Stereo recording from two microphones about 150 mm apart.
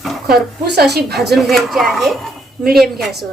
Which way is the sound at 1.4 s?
Centre (ahead or behind).